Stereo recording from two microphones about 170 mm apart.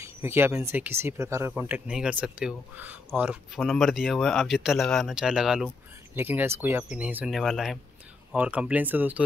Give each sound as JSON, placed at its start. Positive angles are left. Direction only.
{"t": 0.0, "sound": "speech", "side_deg": -15}
{"t": 1.5, "sound": "speech", "side_deg": -5}